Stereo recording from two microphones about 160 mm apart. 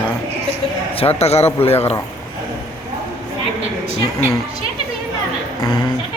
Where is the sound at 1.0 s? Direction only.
40° left (ahead or behind).